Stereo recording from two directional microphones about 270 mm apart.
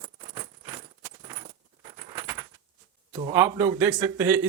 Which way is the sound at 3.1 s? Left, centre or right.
Centre.